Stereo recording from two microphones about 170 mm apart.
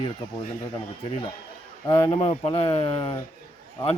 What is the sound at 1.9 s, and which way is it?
Speech, 35° left (ahead or behind).